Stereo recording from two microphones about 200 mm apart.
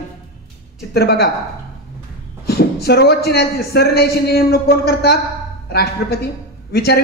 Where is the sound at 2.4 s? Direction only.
50° left (ahead or behind).